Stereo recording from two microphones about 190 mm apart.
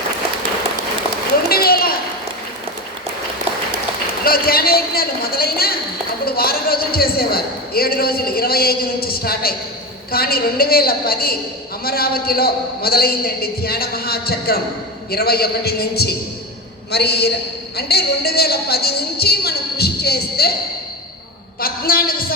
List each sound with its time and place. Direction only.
1.5 s children playing: 55° left (ahead or behind)
4.2 s a woman's voice: 50° left (ahead or behind)
21.6 s a man's voice: 50° left (ahead or behind)